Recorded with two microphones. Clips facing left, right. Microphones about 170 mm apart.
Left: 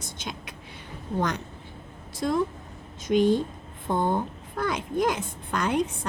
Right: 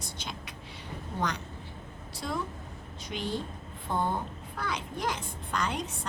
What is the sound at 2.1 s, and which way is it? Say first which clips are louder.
A child's voice: left 9 dB; 45° left (ahead or behind).